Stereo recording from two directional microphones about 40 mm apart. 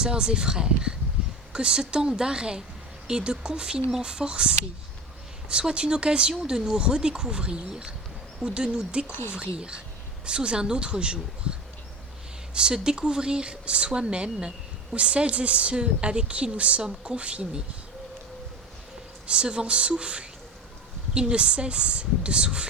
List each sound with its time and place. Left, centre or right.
0.0 s speech: right
12.5 s a woman's voice: centre
19.3 s speech: right